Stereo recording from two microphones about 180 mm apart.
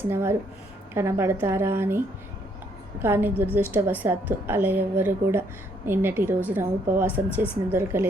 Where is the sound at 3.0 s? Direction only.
10° right (ahead or behind).